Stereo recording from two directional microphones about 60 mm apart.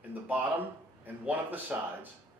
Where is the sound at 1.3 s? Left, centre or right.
Right.